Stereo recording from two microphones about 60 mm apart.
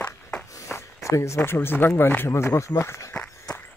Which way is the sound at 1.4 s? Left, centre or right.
Left.